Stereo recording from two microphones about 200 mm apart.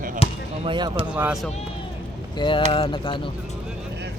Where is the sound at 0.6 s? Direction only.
25° right (ahead or behind).